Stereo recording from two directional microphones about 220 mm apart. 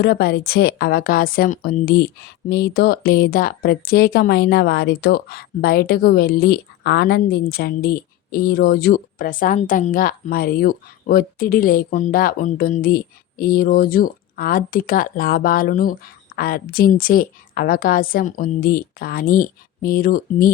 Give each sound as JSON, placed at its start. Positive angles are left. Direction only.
{"t": 0.0, "sound": "speech", "side_deg": 45}